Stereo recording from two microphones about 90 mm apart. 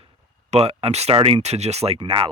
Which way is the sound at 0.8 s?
90° right.